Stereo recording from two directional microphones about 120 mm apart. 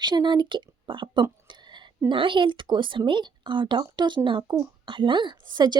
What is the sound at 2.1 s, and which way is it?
Speech, 45° right (ahead or behind).